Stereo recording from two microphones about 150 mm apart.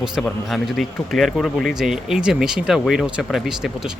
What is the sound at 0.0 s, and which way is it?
Speech, centre (ahead or behind).